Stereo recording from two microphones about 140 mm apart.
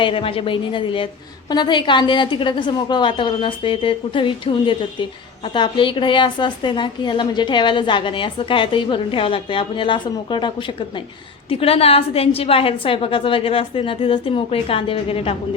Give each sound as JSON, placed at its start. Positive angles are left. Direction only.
{"t": 0.0, "sound": "a woman's voice", "side_deg": 40}